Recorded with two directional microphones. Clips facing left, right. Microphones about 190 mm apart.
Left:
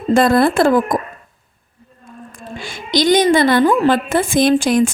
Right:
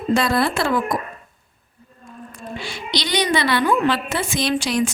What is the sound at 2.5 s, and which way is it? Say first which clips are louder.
A woman's voice: left 7 dB; 50° left (ahead or behind).